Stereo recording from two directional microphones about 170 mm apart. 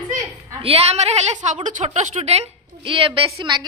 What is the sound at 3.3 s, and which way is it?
Speech, 25° right (ahead or behind).